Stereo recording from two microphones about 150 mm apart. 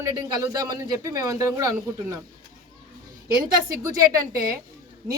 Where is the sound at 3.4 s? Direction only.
25° right (ahead or behind).